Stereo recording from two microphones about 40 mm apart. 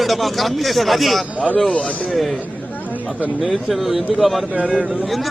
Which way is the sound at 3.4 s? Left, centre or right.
Centre.